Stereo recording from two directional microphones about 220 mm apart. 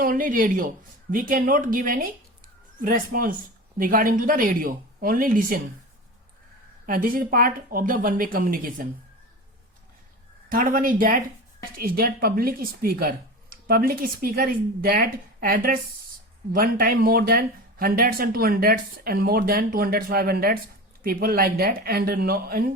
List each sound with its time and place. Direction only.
0.0 s speech: 40° right (ahead or behind)
6.8 s speech: 40° right (ahead or behind)
10.5 s speech: 40° right (ahead or behind)